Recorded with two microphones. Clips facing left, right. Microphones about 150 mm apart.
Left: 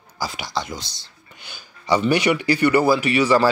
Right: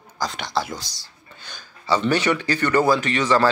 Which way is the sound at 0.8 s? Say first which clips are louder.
Left 1 dB; 25° left (ahead or behind).